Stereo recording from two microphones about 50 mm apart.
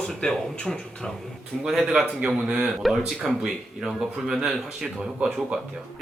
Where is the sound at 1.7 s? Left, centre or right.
Centre.